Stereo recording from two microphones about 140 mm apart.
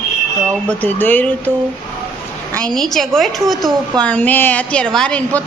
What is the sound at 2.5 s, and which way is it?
A woman's voice, 5° left (ahead or behind).